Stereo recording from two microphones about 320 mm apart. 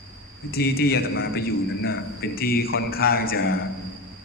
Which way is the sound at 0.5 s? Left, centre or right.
Left.